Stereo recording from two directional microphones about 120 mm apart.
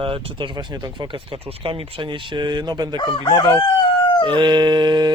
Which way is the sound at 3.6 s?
35° left (ahead or behind).